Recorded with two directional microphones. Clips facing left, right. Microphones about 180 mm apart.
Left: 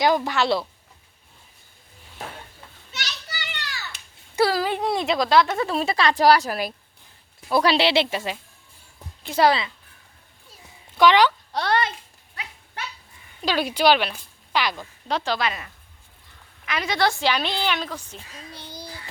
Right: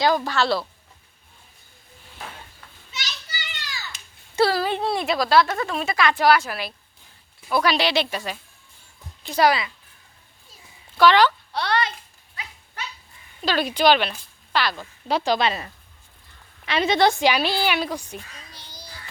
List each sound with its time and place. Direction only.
0.0 s speech: 20° left (ahead or behind)
2.9 s children playing: 65° left (ahead or behind)
4.4 s speech: 15° left (ahead or behind)
5.6 s speech: 35° left (ahead or behind)
7.5 s speech: 30° left (ahead or behind)
10.9 s speech: 15° left (ahead or behind)
11.5 s a sound: 45° left (ahead or behind)
13.4 s speech: 10° left (ahead or behind)
15.0 s a woman's voice: 10° right (ahead or behind)
15.4 s a woman's voice: 30° right (ahead or behind); by 18.2 s 15° right (ahead or behind)
18.5 s a sound: 55° left (ahead or behind)